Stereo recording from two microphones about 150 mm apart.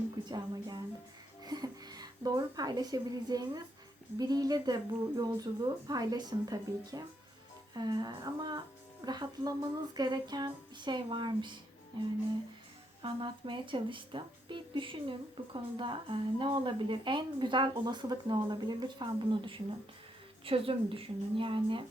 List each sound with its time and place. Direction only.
0.3 s a woman's voice: 30° right (ahead or behind)